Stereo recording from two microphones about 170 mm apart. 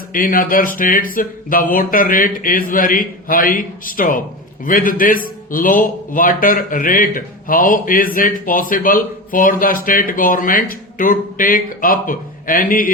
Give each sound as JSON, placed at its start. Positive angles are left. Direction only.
{"t": 0.1, "sound": "a man's voice", "side_deg": 55}